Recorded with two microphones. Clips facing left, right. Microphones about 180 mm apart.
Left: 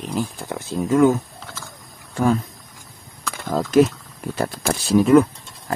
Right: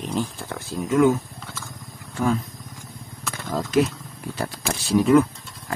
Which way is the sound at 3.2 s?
5° right (ahead or behind).